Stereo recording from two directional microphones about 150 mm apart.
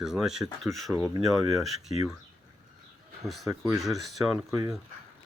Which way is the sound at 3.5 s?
20° right (ahead or behind).